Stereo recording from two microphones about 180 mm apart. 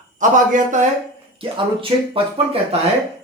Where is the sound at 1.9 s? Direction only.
25° right (ahead or behind).